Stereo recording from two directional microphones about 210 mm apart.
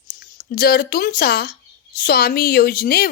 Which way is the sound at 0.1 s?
45° left (ahead or behind).